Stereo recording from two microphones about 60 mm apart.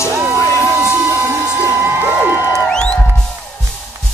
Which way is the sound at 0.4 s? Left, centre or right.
Left.